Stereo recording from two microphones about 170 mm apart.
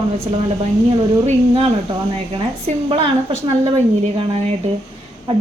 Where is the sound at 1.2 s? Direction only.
35° right (ahead or behind).